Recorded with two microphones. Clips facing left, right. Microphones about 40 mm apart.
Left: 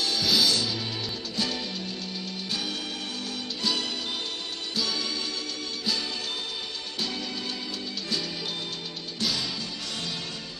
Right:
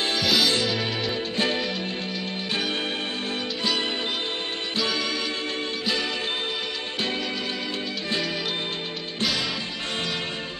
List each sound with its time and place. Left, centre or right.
0.2 s music: centre
1.3 s music: right